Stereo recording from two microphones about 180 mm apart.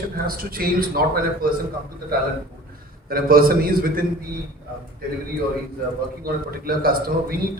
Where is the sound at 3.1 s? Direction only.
55° right (ahead or behind).